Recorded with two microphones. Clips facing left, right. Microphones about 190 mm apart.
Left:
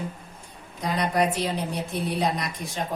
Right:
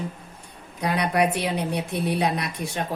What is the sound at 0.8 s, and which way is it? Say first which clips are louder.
Speech: right 2 dB; 65° right (ahead or behind).